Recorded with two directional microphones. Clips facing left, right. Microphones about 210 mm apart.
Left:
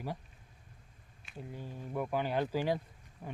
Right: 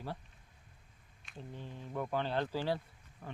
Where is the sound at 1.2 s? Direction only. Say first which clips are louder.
Left 2 dB; 5° left (ahead or behind).